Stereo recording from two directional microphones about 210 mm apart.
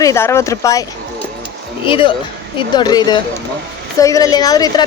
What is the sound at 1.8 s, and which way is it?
A woman's voice, 25° left (ahead or behind).